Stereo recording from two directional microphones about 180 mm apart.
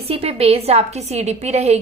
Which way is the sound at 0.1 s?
35° right (ahead or behind).